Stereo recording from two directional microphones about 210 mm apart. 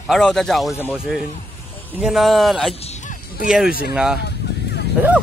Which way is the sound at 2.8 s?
35° left (ahead or behind).